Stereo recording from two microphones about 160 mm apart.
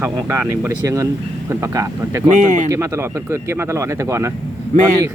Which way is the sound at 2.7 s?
15° right (ahead or behind).